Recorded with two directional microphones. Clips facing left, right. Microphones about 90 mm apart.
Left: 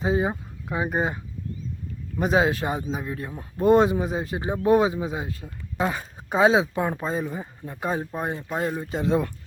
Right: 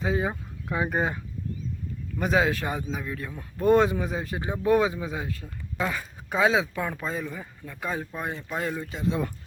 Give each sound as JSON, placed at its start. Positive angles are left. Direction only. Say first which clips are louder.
{"t": 0.0, "sound": "speech", "louder": "left 3 dB", "side_deg": 25}
{"t": 0.7, "sound": "speech", "louder": "left 1 dB", "side_deg": 10}
{"t": 2.1, "sound": "speech", "louder": "left 3 dB", "side_deg": 25}